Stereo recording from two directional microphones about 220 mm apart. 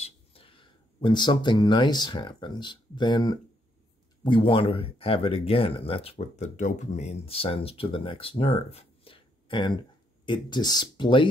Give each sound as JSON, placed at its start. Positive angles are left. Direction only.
{"t": 0.0, "sound": "speech", "side_deg": 25}